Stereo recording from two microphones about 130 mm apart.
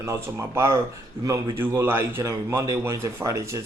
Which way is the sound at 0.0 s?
20° right (ahead or behind).